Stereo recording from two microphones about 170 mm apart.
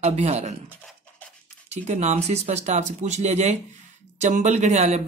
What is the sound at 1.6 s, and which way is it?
Speech, 40° right (ahead or behind).